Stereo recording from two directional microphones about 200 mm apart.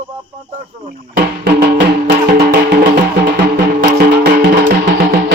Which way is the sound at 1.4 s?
60° right (ahead or behind).